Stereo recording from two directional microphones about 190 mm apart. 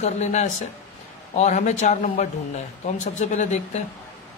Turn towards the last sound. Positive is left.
turn(degrees=35)  # may be behind; listen again after turning